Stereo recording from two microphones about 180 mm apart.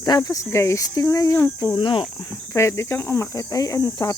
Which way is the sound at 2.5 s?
15° left (ahead or behind).